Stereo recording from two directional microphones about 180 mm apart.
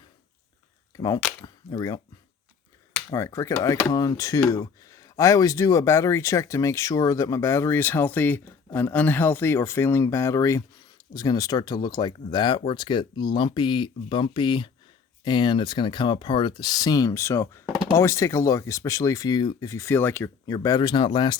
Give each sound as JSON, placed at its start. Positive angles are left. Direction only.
{"t": 0.9, "sound": "speech", "side_deg": 20}
{"t": 3.1, "sound": "speech", "side_deg": 20}